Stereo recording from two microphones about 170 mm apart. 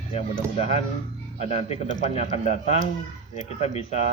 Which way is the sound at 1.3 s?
40° left (ahead or behind).